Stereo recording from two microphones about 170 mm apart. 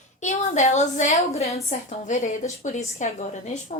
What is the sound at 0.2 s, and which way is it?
A woman's voice, 45° left (ahead or behind).